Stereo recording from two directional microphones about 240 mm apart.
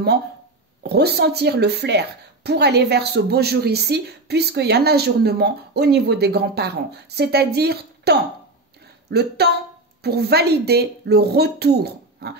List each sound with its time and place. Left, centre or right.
0.8 s a woman's voice: right